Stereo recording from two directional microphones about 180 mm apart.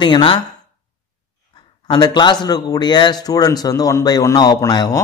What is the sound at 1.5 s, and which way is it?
A man's voice, 25° left (ahead or behind).